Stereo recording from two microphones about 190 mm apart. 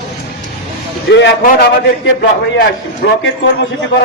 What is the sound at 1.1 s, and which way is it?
A man's voice, 65° left (ahead or behind).